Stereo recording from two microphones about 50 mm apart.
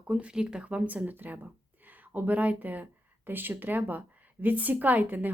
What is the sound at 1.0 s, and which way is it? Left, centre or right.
A woman's voice, right.